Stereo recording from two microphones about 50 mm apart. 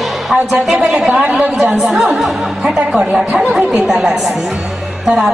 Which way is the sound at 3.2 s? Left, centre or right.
Centre.